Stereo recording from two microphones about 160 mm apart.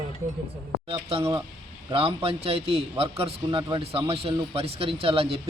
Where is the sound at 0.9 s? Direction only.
35° right (ahead or behind).